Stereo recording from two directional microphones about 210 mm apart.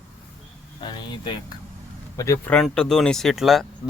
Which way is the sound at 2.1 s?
15° left (ahead or behind).